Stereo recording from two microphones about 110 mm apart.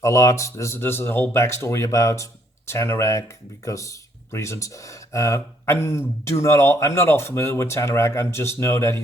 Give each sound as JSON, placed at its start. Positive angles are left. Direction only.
{"t": 0.0, "sound": "speech", "side_deg": 30}